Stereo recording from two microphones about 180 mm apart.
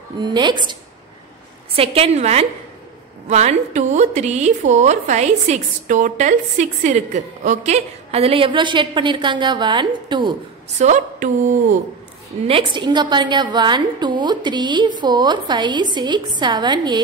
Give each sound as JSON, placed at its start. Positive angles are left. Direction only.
{"t": 0.2, "sound": "a woman's voice", "side_deg": -25}
{"t": 1.8, "sound": "speech", "side_deg": -35}
{"t": 10.8, "sound": "speech", "side_deg": -40}
{"t": 12.4, "sound": "a woman's voice", "side_deg": -30}